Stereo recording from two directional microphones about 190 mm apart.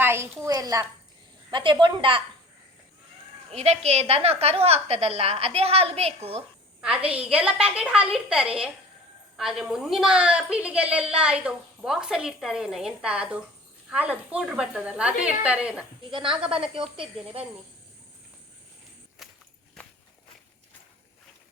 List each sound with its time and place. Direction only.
0.0 s a woman's voice: 10° right (ahead or behind)
3.5 s a woman's voice: 35° right (ahead or behind)
6.8 s a woman's voice: 5° right (ahead or behind)
16.0 s speech: 25° right (ahead or behind)
19.2 s walk: centre (ahead or behind)